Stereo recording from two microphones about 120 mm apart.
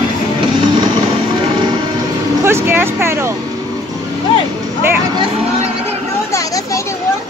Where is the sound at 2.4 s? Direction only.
20° right (ahead or behind).